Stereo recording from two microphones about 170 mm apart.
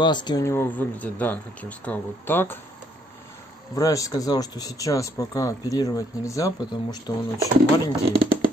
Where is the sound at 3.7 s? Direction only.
20° left (ahead or behind).